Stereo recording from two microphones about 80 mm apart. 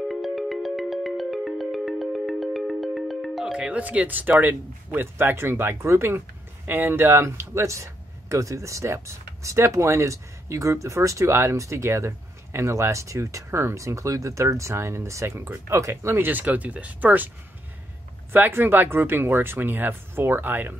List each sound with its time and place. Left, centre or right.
0.1 s music: centre; by 16.3 s right
16.3 s speech: right
18.3 s speech: right